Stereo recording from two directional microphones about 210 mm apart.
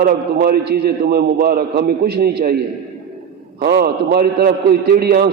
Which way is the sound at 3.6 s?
50° right (ahead or behind).